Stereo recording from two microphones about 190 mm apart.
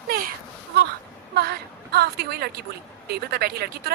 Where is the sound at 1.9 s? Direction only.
55° right (ahead or behind).